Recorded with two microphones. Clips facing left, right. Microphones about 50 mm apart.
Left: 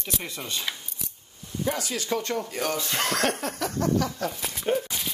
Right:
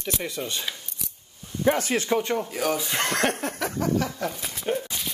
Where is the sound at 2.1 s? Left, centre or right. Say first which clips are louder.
Right 1 dB; centre.